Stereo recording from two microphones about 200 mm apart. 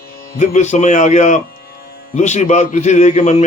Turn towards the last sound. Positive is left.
turn(degrees=35)  # may be behind; listen again after turning